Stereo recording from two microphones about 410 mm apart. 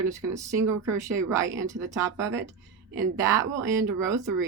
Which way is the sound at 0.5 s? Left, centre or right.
Right.